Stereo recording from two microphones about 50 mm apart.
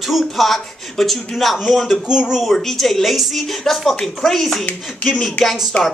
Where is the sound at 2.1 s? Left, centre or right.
Centre.